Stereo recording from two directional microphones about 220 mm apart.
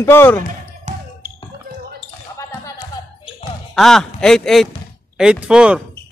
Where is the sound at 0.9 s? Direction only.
30° right (ahead or behind).